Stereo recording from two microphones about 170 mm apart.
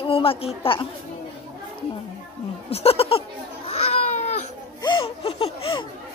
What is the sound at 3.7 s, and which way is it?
Baby cry, 40° left (ahead or behind).